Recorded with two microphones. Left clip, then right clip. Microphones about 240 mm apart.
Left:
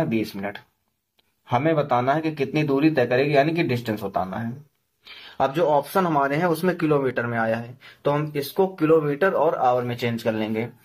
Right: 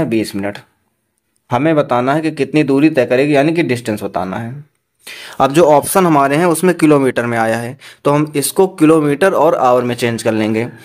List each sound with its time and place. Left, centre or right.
0.0 s speech: right
5.4 s speech: right